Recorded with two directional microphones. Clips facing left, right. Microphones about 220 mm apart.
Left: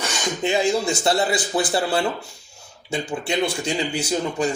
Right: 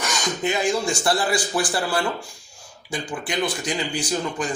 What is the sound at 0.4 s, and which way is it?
Speech, 25° left (ahead or behind).